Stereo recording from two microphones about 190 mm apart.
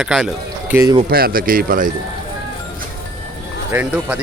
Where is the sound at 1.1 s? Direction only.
50° right (ahead or behind).